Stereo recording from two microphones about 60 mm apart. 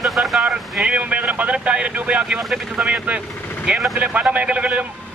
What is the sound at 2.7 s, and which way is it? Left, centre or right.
A man's voice, centre.